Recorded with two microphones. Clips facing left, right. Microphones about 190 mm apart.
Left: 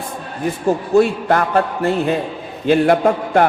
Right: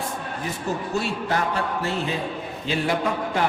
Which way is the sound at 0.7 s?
55° left (ahead or behind).